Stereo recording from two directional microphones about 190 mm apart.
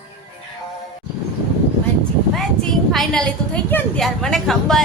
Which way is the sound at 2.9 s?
5° left (ahead or behind).